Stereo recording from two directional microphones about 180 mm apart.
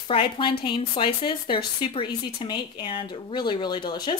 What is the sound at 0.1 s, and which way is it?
Speech, 30° left (ahead or behind).